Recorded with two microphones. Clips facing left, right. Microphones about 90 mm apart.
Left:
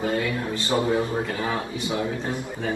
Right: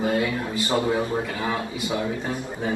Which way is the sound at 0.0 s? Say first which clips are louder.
Right 2 dB; 20° right (ahead or behind).